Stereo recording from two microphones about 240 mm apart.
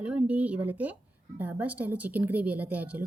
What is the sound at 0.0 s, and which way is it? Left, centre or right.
A woman's voice, centre.